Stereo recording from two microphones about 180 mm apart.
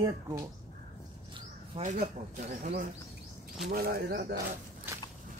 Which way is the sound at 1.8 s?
45° right (ahead or behind).